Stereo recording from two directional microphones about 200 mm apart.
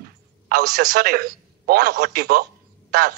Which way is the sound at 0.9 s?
50° right (ahead or behind).